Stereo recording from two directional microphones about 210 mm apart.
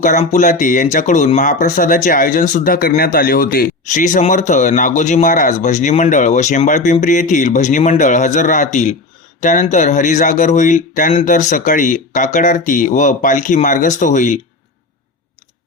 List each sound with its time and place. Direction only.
0.0 s speech: 35° left (ahead or behind)